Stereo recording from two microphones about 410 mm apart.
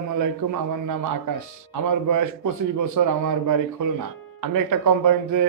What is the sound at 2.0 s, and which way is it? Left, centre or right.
A man's voice, right.